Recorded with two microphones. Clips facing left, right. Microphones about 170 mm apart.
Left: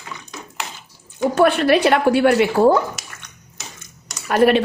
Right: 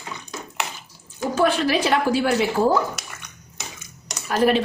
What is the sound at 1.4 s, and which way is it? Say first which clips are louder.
Speech: left 5 dB; 65° left (ahead or behind).